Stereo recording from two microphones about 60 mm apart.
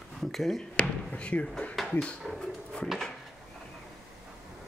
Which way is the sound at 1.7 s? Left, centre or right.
Centre.